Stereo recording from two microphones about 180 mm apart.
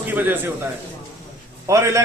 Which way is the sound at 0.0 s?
10° right (ahead or behind).